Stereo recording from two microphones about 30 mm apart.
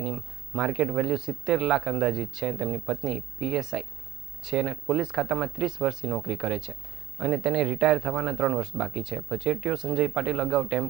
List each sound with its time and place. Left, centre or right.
0.0 s speech: centre